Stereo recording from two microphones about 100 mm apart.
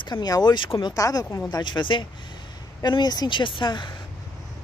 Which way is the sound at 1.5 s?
50° left (ahead or behind).